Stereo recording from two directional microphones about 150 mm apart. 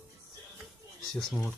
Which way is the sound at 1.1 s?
5° left (ahead or behind).